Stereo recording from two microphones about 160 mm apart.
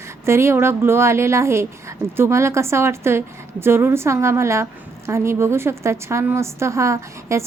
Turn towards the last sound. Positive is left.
turn(degrees=-20)  # may be behind; listen again after turning